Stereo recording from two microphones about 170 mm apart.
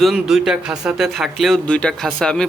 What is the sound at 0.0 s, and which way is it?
Speech, centre (ahead or behind).